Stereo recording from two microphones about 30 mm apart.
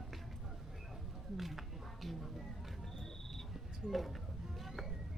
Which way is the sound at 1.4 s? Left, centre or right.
Centre.